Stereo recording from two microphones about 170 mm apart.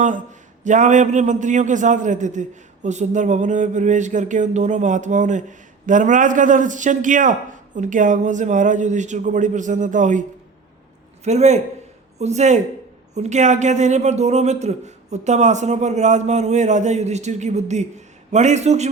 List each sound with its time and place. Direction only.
0.6 s a man's voice: 45° right (ahead or behind)